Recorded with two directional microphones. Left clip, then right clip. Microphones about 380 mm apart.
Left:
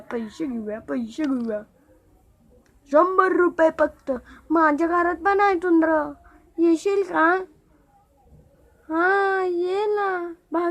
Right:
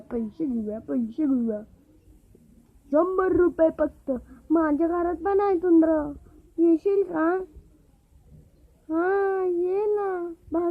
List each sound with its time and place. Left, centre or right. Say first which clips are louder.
0.3 s speech: left 1 dB; centre
2.9 s speech: left 4 dB; centre
8.9 s speech: left 4 dB; centre